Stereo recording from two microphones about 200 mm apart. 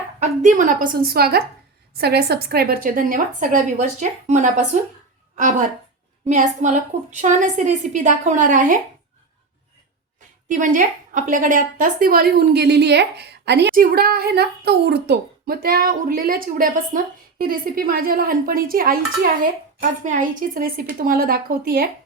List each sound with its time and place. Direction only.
0.2 s a woman's voice: 40° right (ahead or behind)
10.5 s a woman's voice: 40° right (ahead or behind)